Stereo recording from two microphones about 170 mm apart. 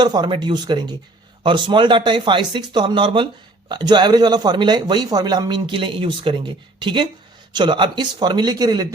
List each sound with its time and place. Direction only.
0.0 s speech: 25° right (ahead or behind)